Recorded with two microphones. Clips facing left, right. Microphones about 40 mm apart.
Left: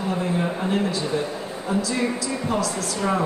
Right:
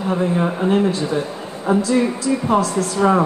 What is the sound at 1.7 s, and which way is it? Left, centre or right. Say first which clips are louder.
A woman's voice: right 7 dB; right.